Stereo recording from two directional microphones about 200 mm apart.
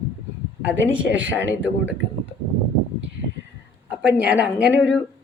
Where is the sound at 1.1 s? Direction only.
70° right (ahead or behind).